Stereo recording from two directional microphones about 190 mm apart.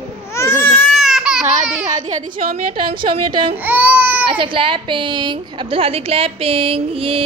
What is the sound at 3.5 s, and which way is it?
Speech, 10° right (ahead or behind).